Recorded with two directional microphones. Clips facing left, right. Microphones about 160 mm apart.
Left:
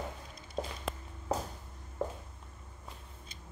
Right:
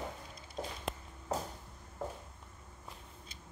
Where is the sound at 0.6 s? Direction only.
90° left.